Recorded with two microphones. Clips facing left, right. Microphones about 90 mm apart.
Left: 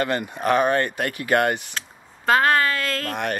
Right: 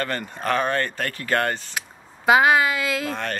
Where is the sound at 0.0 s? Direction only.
15° left (ahead or behind).